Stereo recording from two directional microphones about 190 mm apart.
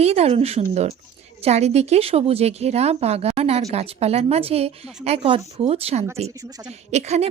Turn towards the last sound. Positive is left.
turn(degrees=-35)  # may be behind; listen again after turning